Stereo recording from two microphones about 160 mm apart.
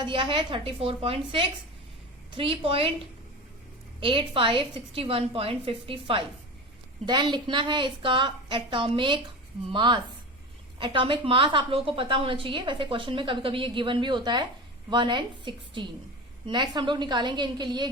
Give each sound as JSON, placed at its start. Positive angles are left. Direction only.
{"t": 0.0, "sound": "a woman's voice", "side_deg": -30}
{"t": 4.0, "sound": "a woman's voice", "side_deg": -30}